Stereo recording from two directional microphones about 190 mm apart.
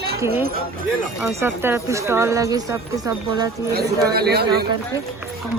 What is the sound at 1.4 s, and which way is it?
Speech, 10° right (ahead or behind).